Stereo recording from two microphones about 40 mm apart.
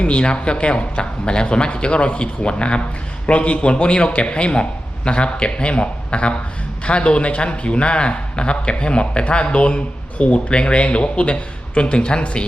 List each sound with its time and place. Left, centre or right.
0.0 s speech: left